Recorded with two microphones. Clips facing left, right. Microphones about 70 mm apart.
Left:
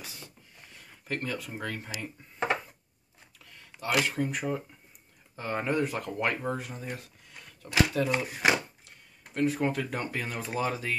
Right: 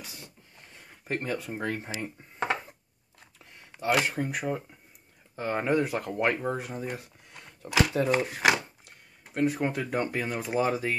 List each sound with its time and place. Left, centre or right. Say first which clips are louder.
1.0 s speech: right 3 dB; right
4.0 s speech: even; right
4.3 s speech: right 1 dB; centre
6.1 s speech: right 4 dB; centre; by 8.1 s right
8.1 s speech: right 2 dB; right
9.5 s speech: even; centre